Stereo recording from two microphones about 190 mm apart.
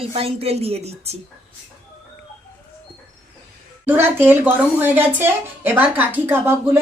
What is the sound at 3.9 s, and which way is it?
Speech, 10° right (ahead or behind).